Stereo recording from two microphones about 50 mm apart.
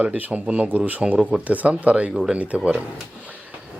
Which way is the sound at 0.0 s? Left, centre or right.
Right.